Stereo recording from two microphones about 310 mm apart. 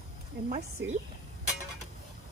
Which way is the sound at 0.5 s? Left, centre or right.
Right.